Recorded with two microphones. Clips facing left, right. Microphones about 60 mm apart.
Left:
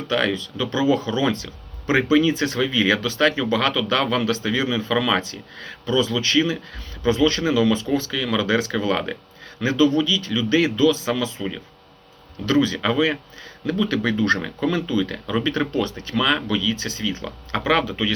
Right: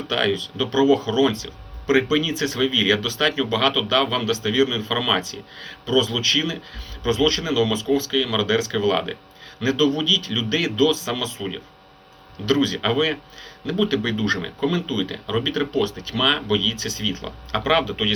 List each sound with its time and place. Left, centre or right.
0.1 s speech: left